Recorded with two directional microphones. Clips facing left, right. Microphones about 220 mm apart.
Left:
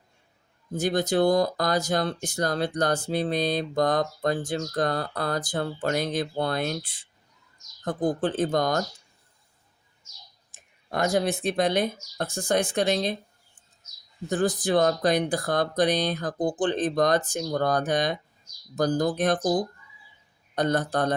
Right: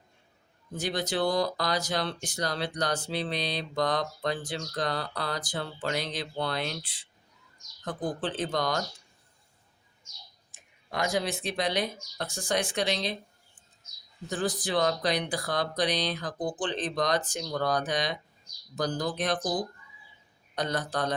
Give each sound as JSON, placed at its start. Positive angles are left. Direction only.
{"t": 0.7, "sound": "speech", "side_deg": 45}
{"t": 7.9, "sound": "speech", "side_deg": 45}
{"t": 10.5, "sound": "speech", "side_deg": 45}
{"t": 14.3, "sound": "speech", "side_deg": 45}